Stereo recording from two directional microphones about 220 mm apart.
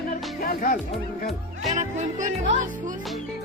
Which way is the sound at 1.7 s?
35° right (ahead or behind).